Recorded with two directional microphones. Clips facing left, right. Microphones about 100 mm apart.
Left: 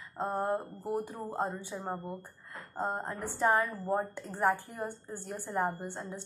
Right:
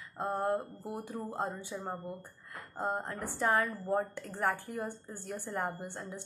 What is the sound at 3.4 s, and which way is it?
Speech, 20° left (ahead or behind).